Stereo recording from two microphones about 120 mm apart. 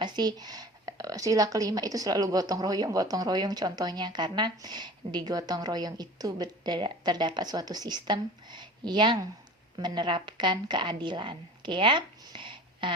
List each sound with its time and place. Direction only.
0.0 s a woman's voice: 35° right (ahead or behind)